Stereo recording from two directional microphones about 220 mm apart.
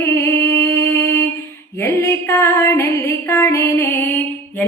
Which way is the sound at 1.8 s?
10° left (ahead or behind).